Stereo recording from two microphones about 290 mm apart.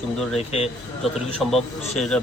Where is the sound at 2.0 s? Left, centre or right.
Centre.